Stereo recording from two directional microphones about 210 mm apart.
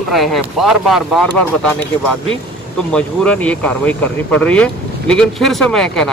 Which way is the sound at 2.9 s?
5° left (ahead or behind).